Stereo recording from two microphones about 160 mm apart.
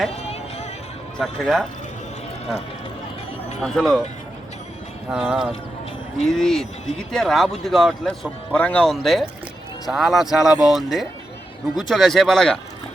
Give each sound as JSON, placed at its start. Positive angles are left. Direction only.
{"t": 0.1, "sound": "music", "side_deg": 40}
{"t": 1.2, "sound": "speech", "side_deg": 5}
{"t": 3.6, "sound": "speech", "side_deg": 0}
{"t": 5.1, "sound": "speech", "side_deg": -5}